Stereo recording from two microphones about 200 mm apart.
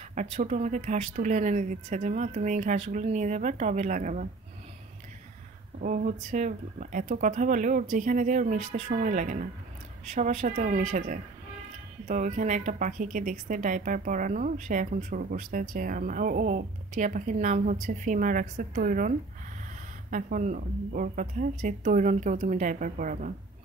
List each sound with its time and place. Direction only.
0.1 s speech: 40° right (ahead or behind)
5.8 s speech: 40° right (ahead or behind)